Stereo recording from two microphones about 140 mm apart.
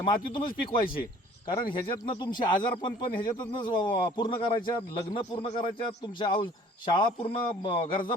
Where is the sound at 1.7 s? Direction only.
35° left (ahead or behind).